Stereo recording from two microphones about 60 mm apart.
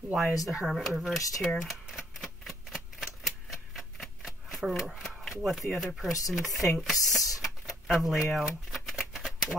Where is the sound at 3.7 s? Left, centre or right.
Centre.